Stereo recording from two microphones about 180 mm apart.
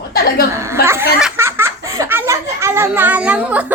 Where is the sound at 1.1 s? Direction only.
5° right (ahead or behind).